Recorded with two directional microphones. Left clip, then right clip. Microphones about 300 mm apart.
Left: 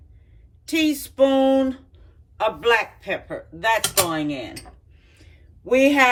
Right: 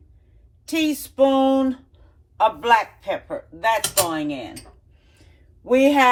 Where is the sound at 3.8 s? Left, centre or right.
Centre.